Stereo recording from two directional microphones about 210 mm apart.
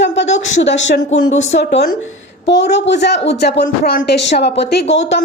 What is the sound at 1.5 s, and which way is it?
A woman's voice, 55° left (ahead or behind).